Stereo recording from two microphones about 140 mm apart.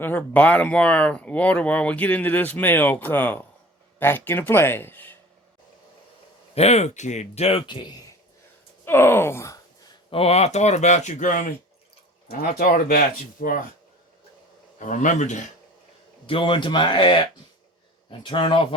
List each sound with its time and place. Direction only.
0.0 s speech: 10° left (ahead or behind)
6.5 s speech: 50° left (ahead or behind); by 8.0 s 30° left (ahead or behind)
8.8 s gasp: 15° left (ahead or behind)
10.1 s speech: 45° left (ahead or behind); by 11.5 s 70° left (ahead or behind)
12.3 s speech: 90° left
14.8 s speech: 65° left (ahead or behind)
16.2 s speech: 35° left (ahead or behind)